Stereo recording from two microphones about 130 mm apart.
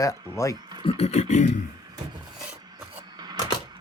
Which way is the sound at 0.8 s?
55° left (ahead or behind).